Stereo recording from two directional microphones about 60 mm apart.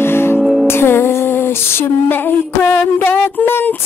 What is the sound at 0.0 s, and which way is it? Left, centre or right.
Music, left.